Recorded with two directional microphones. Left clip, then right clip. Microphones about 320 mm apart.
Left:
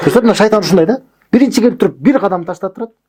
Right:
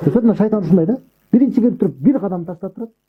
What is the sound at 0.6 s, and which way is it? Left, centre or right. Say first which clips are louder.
Speech: left 6 dB; centre.